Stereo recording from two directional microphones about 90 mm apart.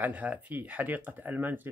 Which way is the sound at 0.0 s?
15° right (ahead or behind).